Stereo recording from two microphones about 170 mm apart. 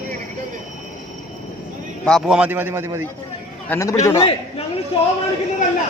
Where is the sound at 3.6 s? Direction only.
10° left (ahead or behind).